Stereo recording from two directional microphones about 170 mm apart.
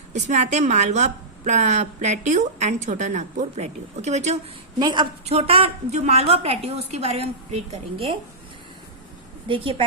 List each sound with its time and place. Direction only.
0.1 s a woman's voice: 40° right (ahead or behind)
4.8 s a woman's voice: 25° right (ahead or behind)
5.3 s a woman's voice: 35° right (ahead or behind)
9.5 s a woman's voice: 30° right (ahead or behind)